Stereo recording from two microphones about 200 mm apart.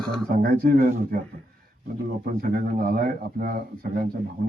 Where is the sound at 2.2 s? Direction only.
45° right (ahead or behind).